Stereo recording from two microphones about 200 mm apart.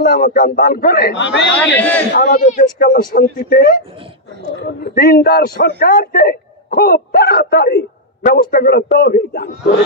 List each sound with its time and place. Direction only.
0.1 s a man's voice: 45° left (ahead or behind); by 1.4 s 65° left (ahead or behind)
1.6 s speech: 10° left (ahead or behind)
2.1 s a man's voice: 40° left (ahead or behind)